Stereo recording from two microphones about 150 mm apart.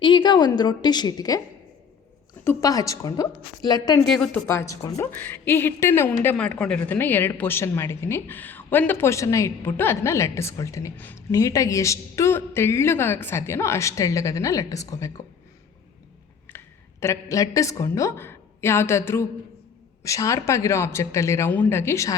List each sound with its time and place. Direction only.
0.0 s a woman's voice: 30° left (ahead or behind)
2.4 s a woman's voice: 20° left (ahead or behind)
4.0 s a woman's voice: centre (ahead or behind)
4.4 s a woman's voice: 20° left (ahead or behind)
16.5 s a sound: 15° left (ahead or behind)
17.0 s a woman's voice: 20° left (ahead or behind)